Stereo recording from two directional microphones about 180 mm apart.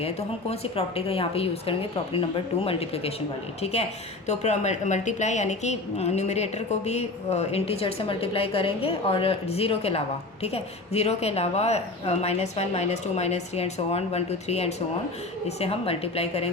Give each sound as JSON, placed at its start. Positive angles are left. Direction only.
{"t": 0.0, "sound": "a woman's voice", "side_deg": 35}